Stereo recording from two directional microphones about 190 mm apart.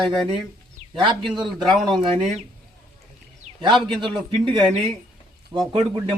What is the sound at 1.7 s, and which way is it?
Speech, centre (ahead or behind).